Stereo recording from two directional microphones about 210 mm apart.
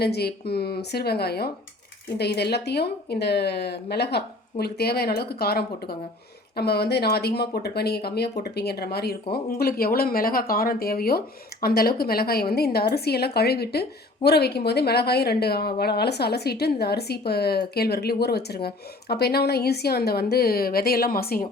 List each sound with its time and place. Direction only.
0.0 s a woman's voice: 50° left (ahead or behind)